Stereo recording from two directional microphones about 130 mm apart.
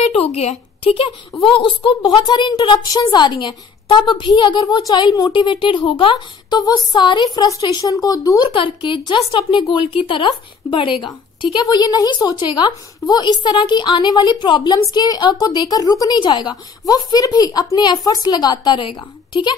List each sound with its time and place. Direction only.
0.0 s a woman's voice: 55° left (ahead or behind); by 19.5 s 35° left (ahead or behind)